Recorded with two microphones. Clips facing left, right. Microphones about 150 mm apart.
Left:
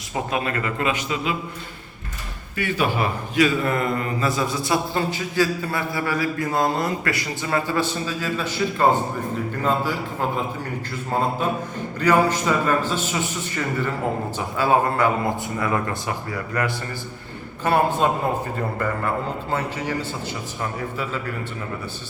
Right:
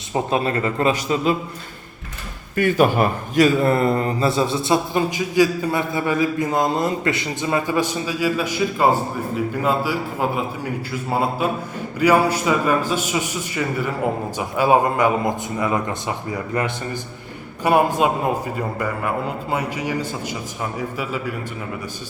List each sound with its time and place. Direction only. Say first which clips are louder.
0.1 s a man's voice: right 4 dB; 30° right (ahead or behind)
2.6 s a man's voice: right 6 dB; 45° right (ahead or behind); by 21.3 s 10° right (ahead or behind)